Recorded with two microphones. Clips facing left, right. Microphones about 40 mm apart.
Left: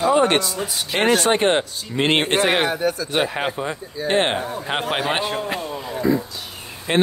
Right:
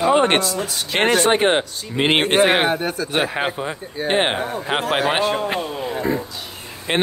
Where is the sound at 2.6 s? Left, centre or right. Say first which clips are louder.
Right 1 dB; right.